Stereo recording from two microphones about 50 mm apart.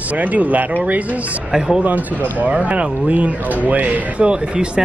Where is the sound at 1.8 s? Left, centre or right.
Right.